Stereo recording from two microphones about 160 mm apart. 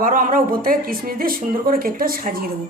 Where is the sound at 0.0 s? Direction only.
55° right (ahead or behind).